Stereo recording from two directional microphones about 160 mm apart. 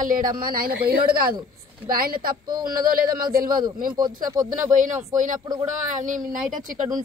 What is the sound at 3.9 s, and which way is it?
Speech, 25° right (ahead or behind).